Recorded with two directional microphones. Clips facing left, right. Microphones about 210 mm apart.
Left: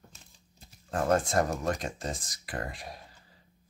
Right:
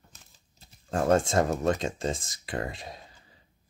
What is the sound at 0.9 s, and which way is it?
Speech, 25° right (ahead or behind).